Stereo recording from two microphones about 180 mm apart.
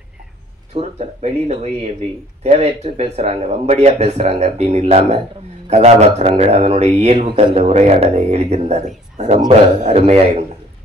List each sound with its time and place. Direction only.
0.7 s a man's voice: 35° right (ahead or behind)